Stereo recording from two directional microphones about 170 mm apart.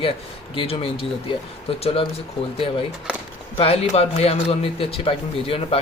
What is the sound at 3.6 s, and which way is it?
Speech, 35° left (ahead or behind).